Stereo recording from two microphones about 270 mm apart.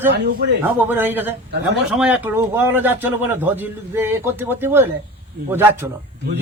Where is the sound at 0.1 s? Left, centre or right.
Right.